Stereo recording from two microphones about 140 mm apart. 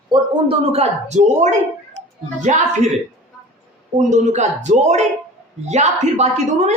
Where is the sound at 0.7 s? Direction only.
55° right (ahead or behind).